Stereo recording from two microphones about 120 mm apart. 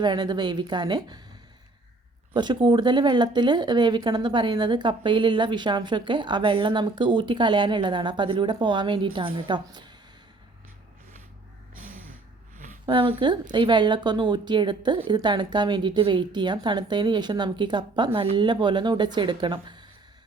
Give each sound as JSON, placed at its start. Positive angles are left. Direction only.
{"t": 0.0, "sound": "speech", "side_deg": -40}
{"t": 2.3, "sound": "speech", "side_deg": -40}
{"t": 12.8, "sound": "speech", "side_deg": -40}